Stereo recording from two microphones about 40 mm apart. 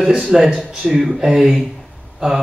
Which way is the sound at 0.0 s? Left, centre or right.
Centre.